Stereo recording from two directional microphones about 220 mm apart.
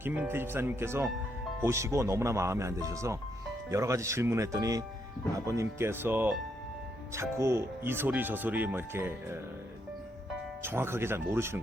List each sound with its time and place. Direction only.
0.0 s speech: 10° right (ahead or behind)
10.6 s speech: 10° right (ahead or behind)